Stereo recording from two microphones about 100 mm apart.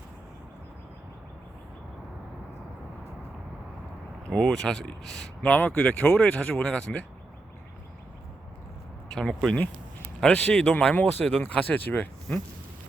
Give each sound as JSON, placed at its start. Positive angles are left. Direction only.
{"t": 4.3, "sound": "speech", "side_deg": 5}
{"t": 9.1, "sound": "speech", "side_deg": 5}